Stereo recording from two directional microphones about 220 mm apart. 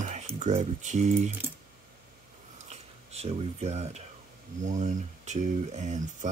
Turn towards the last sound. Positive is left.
turn(degrees=-30)  # may be behind; listen again after turning